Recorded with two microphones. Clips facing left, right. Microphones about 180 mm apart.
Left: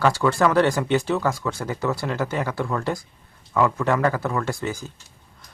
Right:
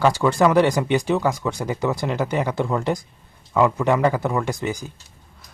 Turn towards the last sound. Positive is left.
turn(degrees=-15)  # may be behind; listen again after turning